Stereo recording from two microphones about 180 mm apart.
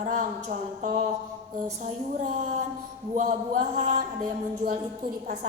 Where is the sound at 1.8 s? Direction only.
45° right (ahead or behind).